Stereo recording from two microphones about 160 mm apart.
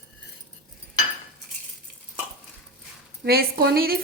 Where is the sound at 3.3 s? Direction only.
75° right (ahead or behind).